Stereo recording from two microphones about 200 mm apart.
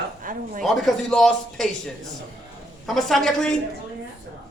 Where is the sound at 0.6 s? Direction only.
Centre (ahead or behind).